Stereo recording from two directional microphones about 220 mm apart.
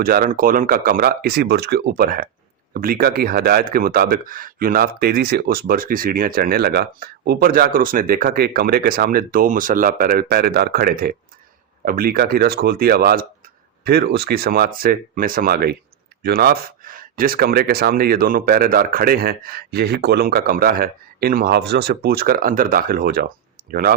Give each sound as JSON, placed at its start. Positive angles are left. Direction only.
{"t": 0.0, "sound": "speech", "side_deg": -40}